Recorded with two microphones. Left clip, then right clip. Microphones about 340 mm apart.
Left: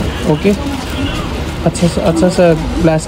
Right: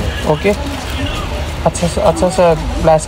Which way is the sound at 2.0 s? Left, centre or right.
Right.